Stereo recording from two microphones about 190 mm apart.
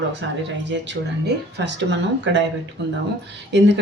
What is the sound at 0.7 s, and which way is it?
Speech, 65° right (ahead or behind).